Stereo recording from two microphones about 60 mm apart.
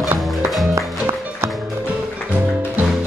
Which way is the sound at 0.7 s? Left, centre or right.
Right.